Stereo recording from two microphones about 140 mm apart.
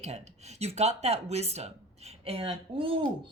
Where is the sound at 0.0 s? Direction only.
55° right (ahead or behind).